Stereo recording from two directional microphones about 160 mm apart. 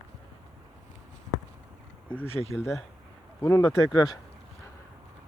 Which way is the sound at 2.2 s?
40° left (ahead or behind).